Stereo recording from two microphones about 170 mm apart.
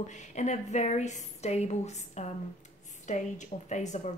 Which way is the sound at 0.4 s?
45° left (ahead or behind).